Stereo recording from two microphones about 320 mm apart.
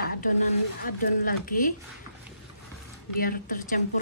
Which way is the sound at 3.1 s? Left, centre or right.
Left.